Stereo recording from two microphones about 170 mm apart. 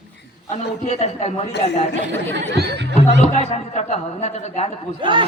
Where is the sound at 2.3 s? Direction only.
85° right.